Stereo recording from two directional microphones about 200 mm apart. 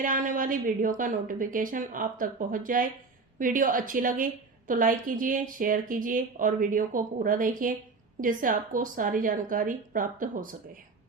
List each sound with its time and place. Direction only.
0.0 s speech: 40° right (ahead or behind)